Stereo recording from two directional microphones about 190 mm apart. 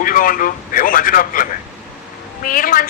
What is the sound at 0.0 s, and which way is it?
A man's voice, 45° left (ahead or behind).